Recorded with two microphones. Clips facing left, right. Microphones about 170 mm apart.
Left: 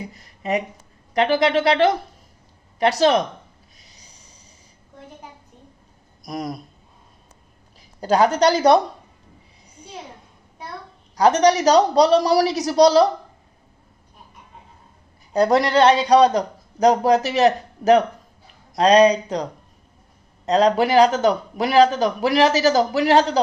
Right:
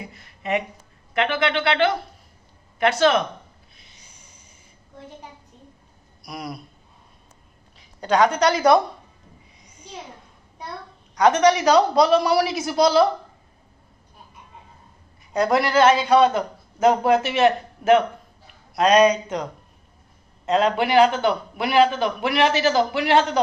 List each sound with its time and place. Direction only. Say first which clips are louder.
0.1 s speech: left 1 dB; 35° left (ahead or behind)
3.8 s a sound: left 1 dB; 40° left (ahead or behind)
6.2 s speech: left 5 dB; 45° left (ahead or behind)
8.4 s speech: left 2 dB; 35° left (ahead or behind)
11.2 s speech: left 1 dB; 35° left (ahead or behind)
15.3 s speech: left 3 dB; 35° left (ahead or behind)